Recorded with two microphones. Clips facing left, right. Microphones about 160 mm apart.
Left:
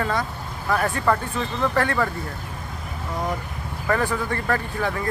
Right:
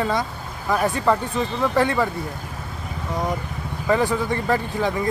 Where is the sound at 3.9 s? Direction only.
15° right (ahead or behind).